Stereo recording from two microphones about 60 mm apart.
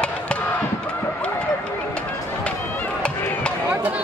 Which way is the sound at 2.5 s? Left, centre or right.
Left.